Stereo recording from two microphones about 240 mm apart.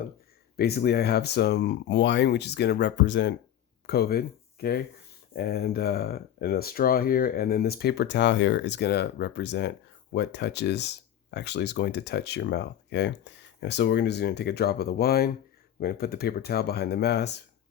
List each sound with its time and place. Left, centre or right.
0.5 s speech: left